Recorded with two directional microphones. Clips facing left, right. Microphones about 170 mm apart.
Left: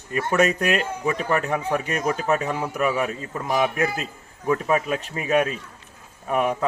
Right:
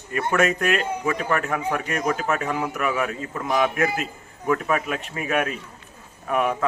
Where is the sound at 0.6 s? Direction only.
20° left (ahead or behind).